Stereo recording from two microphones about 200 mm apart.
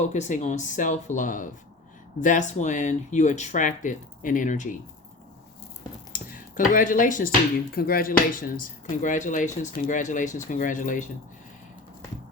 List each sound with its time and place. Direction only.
0.0 s speech: 35° left (ahead or behind)
6.1 s speech: 45° left (ahead or behind)